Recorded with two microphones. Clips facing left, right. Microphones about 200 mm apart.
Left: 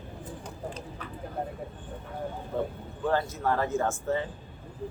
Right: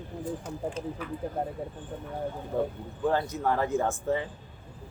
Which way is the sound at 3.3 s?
15° right (ahead or behind).